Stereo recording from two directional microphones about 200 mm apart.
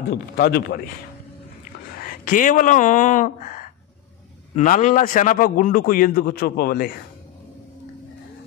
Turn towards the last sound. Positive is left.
turn(degrees=50)  # may be behind; listen again after turning